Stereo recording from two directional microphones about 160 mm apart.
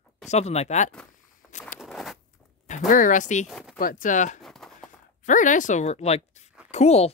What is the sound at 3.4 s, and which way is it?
Speech, centre (ahead or behind).